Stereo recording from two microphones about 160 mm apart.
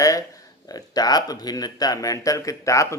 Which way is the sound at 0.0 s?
20° left (ahead or behind).